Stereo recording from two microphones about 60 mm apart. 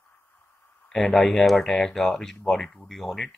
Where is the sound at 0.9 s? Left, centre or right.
Centre.